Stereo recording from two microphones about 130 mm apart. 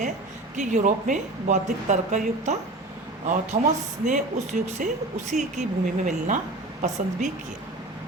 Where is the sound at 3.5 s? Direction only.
40° right (ahead or behind).